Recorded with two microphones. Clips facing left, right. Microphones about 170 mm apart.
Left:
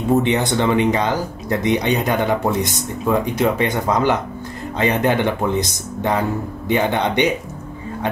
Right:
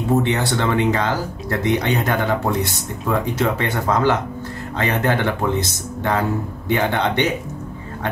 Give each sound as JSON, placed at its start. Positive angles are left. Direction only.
{"t": 0.2, "sound": "speech", "side_deg": 20}